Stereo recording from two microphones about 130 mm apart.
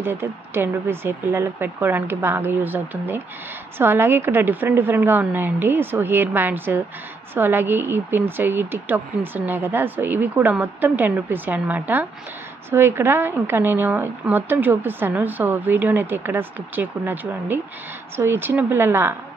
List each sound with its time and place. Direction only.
0.0 s a woman's voice: 20° right (ahead or behind)